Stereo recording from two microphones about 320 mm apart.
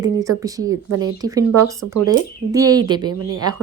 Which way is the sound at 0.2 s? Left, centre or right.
Centre.